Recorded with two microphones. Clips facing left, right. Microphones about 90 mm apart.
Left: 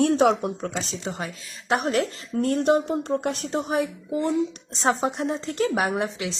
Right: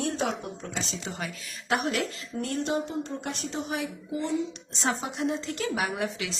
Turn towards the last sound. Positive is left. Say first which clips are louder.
# left 5 dB
turn(degrees=30)  # may be behind; listen again after turning